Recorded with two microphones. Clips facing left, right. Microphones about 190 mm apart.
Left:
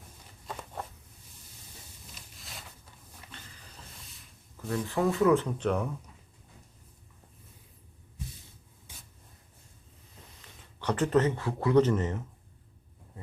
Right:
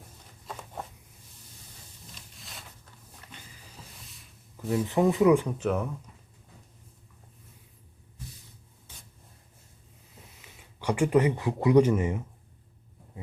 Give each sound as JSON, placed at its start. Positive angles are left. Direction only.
{"t": 2.1, "sound": "a sound", "side_deg": 0}
{"t": 4.7, "sound": "speech", "side_deg": -20}
{"t": 10.4, "sound": "speech", "side_deg": -10}